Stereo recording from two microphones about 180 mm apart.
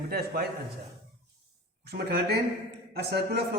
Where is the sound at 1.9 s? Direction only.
60° right (ahead or behind).